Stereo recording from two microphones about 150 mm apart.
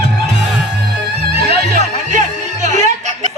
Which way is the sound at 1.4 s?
90° right.